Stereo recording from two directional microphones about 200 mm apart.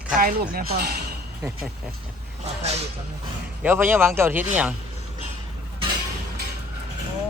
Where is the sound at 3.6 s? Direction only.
10° right (ahead or behind).